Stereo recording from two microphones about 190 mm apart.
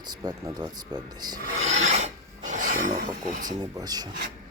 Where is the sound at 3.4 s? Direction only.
20° right (ahead or behind).